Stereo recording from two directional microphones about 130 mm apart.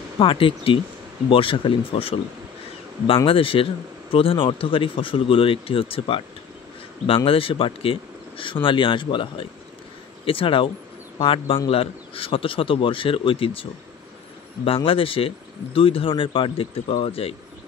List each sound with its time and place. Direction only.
0.2 s a man's voice: 40° left (ahead or behind)
3.3 s a man's voice: 45° left (ahead or behind)